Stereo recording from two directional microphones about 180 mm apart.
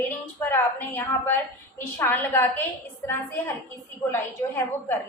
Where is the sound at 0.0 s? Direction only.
10° left (ahead or behind).